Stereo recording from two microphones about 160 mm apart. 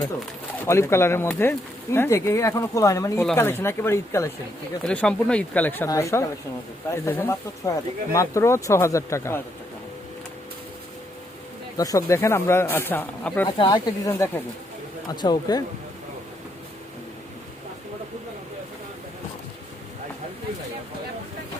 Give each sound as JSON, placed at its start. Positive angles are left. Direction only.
{"t": 0.6, "sound": "speech", "side_deg": 15}
{"t": 4.8, "sound": "speech", "side_deg": 5}
{"t": 11.8, "sound": "speech", "side_deg": 20}
{"t": 13.6, "sound": "speech", "side_deg": 30}
{"t": 14.1, "sound": "speech", "side_deg": 15}
{"t": 15.1, "sound": "speech", "side_deg": 25}